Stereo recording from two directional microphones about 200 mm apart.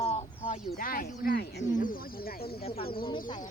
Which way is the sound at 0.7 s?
45° left (ahead or behind).